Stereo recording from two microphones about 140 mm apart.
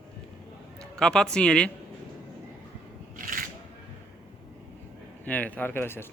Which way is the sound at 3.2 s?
75° right (ahead or behind).